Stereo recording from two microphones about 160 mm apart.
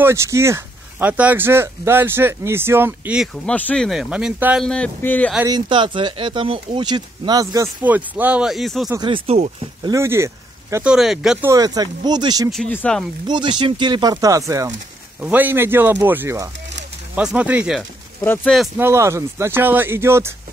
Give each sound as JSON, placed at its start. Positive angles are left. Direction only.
{"t": 0.0, "sound": "speech", "side_deg": -15}
{"t": 3.4, "sound": "speech", "side_deg": 10}
{"t": 4.6, "sound": "speech", "side_deg": 5}
{"t": 5.5, "sound": "speech", "side_deg": -30}
{"t": 7.8, "sound": "speech", "side_deg": -10}
{"t": 9.0, "sound": "speech", "side_deg": -35}
{"t": 9.8, "sound": "speech", "side_deg": -15}
{"t": 10.9, "sound": "speech", "side_deg": -5}
{"t": 11.4, "sound": "speech", "side_deg": -20}
{"t": 12.4, "sound": "speech", "side_deg": 0}
{"t": 13.3, "sound": "speech", "side_deg": -30}
{"t": 18.2, "sound": "speech", "side_deg": 15}
{"t": 18.8, "sound": "speech", "side_deg": -15}